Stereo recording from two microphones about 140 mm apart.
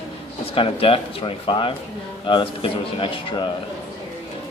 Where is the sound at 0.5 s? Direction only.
40° left (ahead or behind).